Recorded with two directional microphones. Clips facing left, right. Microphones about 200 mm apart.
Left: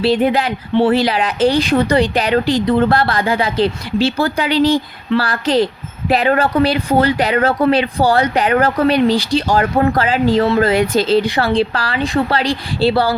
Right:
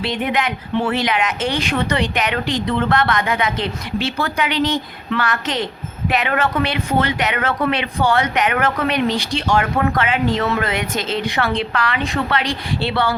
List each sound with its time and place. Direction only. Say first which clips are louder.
0.0 s speech: left 7 dB; 30° left (ahead or behind)